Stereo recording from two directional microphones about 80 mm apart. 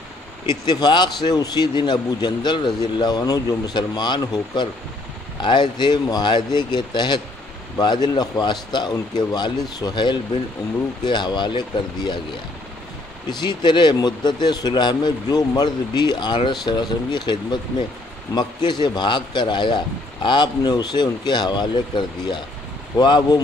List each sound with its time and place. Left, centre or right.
0.5 s a man's voice: left
5.4 s a man's voice: left
13.3 s a man's voice: left
20.2 s speech: left